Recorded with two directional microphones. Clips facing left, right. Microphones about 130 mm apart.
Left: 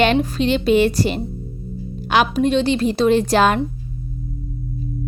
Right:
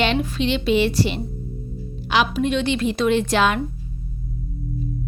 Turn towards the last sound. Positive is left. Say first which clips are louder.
# left 4 dB
turn(degrees=40)  # may be behind; listen again after turning